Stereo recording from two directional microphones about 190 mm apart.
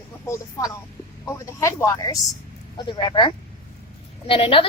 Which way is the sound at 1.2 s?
15° left (ahead or behind).